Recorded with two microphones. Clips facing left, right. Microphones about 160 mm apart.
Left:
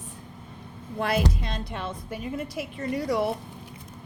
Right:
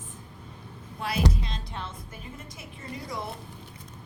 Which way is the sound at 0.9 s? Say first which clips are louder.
Left 3 dB; 55° left (ahead or behind).